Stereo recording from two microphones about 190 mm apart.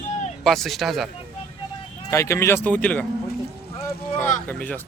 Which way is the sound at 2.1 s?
15° left (ahead or behind).